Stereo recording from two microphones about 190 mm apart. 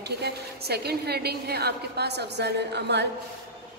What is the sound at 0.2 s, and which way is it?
A woman's voice, 55° right (ahead or behind).